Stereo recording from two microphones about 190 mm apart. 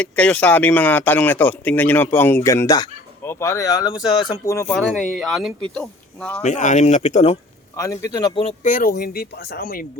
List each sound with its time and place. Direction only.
0.0 s speech: 5° left (ahead or behind)
4.7 s a man's voice: centre (ahead or behind)
6.4 s speech: 40° left (ahead or behind)
7.8 s a man's voice: 15° left (ahead or behind)
8.6 s speech: 45° left (ahead or behind)
9.0 s speech: 55° left (ahead or behind)